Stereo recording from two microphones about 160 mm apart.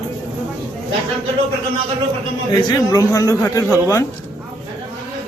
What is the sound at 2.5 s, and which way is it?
A man's voice, 25° left (ahead or behind).